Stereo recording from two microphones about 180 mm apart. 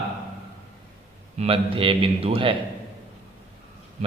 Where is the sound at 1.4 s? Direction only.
30° right (ahead or behind).